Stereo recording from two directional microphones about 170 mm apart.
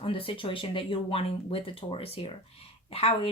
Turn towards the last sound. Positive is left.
turn(degrees=35)  # may be behind; listen again after turning